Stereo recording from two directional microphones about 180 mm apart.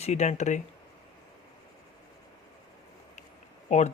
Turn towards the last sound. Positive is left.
turn(degrees=40)  # may be behind; listen again after turning